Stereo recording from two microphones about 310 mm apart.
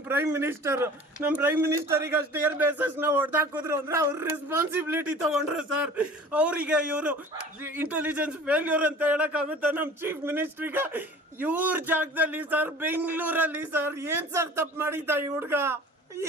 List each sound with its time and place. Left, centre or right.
0.1 s a man's voice: centre